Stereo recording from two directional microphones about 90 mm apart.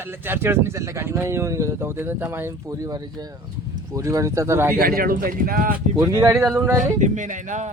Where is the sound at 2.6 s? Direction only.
40° right (ahead or behind).